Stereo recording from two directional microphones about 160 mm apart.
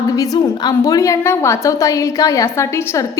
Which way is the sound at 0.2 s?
20° left (ahead or behind).